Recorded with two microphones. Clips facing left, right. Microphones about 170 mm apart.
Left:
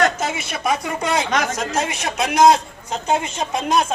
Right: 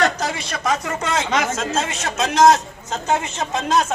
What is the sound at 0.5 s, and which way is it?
A woman's voice, 10° left (ahead or behind).